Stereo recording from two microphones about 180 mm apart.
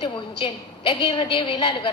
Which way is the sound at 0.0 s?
25° left (ahead or behind).